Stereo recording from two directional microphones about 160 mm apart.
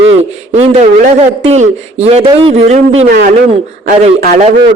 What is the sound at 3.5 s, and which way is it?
Speech, 40° right (ahead or behind).